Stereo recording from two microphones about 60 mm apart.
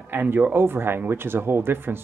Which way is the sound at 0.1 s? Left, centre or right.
Right.